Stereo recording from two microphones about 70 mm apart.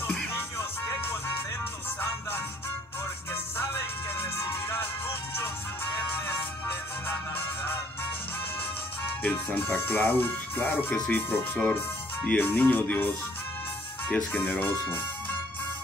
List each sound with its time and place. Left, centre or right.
0.0 s music: left
3.5 s music: left
9.2 s speech: left
14.1 s speech: left